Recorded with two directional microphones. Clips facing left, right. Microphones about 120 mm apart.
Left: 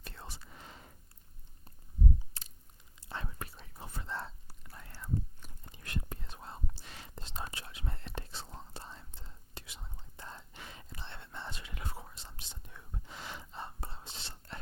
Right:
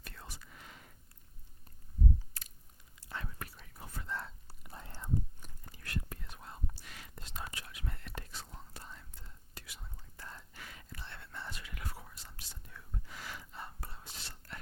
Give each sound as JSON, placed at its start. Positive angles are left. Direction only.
{"t": 0.0, "sound": "whispering", "side_deg": 30}
{"t": 2.4, "sound": "chewing", "side_deg": 25}
{"t": 3.1, "sound": "whispering", "side_deg": 25}
{"t": 4.6, "sound": "whispering", "side_deg": -20}
{"t": 5.6, "sound": "whispering", "side_deg": 20}